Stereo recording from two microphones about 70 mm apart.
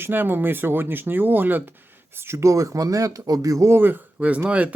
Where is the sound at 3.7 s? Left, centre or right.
Right.